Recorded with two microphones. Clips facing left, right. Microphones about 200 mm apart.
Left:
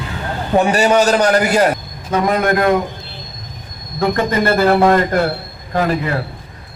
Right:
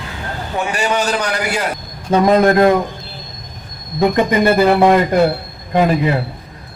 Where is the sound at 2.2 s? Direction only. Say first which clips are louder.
Right 5 dB; 25° right (ahead or behind).